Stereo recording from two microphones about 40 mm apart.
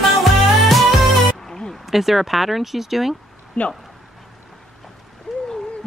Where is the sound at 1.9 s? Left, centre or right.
Centre.